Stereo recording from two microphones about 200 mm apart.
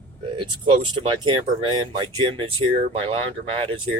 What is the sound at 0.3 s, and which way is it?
Speech, 25° right (ahead or behind).